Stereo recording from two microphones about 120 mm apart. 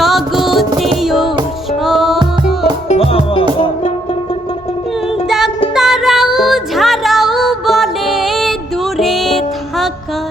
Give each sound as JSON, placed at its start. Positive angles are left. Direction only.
{"t": 0.0, "sound": "music", "side_deg": 0}
{"t": 2.9, "sound": "music", "side_deg": 55}
{"t": 5.7, "sound": "music", "side_deg": -5}